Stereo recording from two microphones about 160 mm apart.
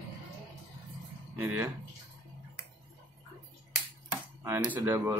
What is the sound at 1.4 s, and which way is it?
Speech, 15° right (ahead or behind).